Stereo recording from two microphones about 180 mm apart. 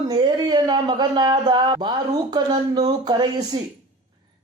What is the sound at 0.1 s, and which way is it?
Speech, 25° right (ahead or behind).